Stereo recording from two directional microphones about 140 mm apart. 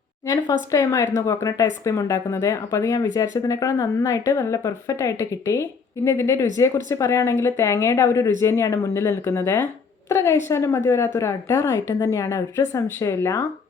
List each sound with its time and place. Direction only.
0.3 s speech: 25° left (ahead or behind)